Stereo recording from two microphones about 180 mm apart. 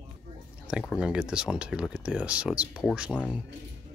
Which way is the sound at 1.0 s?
5° right (ahead or behind).